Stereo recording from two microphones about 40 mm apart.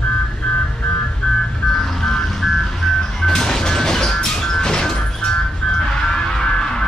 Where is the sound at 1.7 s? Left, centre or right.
Centre.